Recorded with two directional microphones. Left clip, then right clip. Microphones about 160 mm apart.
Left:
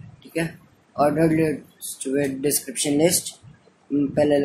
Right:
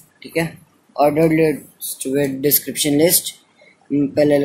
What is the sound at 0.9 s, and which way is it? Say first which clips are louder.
Speech: right 5 dB; 25° right (ahead or behind).